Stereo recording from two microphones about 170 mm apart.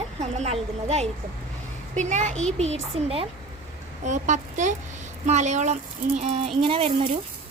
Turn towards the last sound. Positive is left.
turn(degrees=-35)  # may be behind; listen again after turning